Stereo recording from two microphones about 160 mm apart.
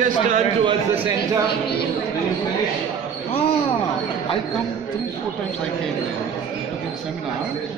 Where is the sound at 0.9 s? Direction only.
10° right (ahead or behind).